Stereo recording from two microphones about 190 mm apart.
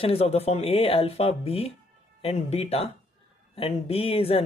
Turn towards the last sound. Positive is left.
turn(degrees=30)  # may be behind; listen again after turning